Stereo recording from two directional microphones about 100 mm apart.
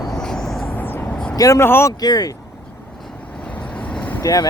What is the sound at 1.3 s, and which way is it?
Speech, 35° left (ahead or behind).